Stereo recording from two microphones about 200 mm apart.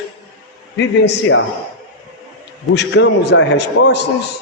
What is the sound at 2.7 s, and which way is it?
A man's voice, 60° left (ahead or behind).